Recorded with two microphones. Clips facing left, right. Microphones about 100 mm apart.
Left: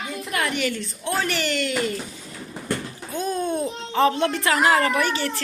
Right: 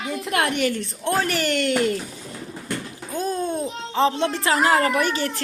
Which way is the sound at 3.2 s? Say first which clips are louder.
Even; 30° right (ahead or behind).